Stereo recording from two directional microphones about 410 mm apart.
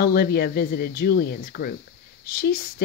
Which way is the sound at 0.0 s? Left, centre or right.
Left.